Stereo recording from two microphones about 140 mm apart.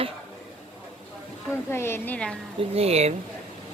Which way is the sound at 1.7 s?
15° left (ahead or behind).